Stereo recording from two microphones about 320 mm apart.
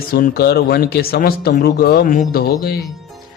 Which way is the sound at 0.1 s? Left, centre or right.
Left.